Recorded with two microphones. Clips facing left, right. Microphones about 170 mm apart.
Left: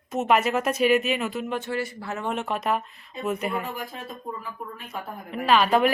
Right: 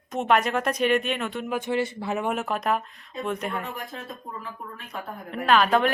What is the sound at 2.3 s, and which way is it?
Speech, centre (ahead or behind).